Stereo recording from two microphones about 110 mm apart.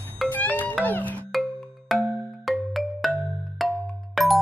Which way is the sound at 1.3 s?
Centre (ahead or behind).